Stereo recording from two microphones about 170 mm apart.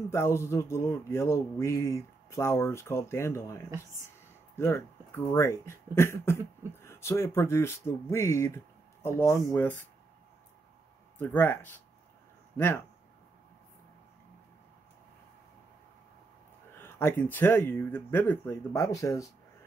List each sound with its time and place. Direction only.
0.1 s speech: 15° left (ahead or behind)
11.1 s speech: 10° left (ahead or behind)
16.7 s speech: 15° left (ahead or behind)